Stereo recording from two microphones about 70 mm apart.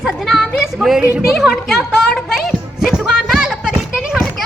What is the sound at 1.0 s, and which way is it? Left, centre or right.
Speech, centre.